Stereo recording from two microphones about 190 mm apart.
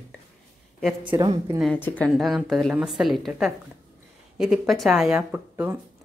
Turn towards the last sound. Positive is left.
turn(degrees=-10)  # may be behind; listen again after turning